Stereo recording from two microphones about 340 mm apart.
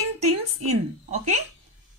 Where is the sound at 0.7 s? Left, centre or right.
Centre.